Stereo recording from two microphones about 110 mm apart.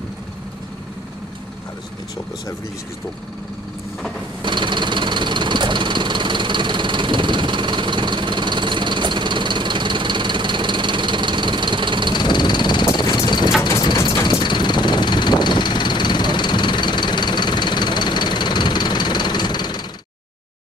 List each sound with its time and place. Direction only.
4.4 s engine: 45° right (ahead or behind)
12.2 s vehicle: 45° left (ahead or behind)